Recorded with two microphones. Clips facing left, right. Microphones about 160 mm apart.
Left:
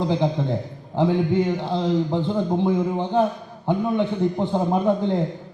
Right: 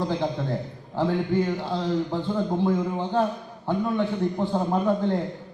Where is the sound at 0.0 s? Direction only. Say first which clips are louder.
Left 4 dB; 20° left (ahead or behind).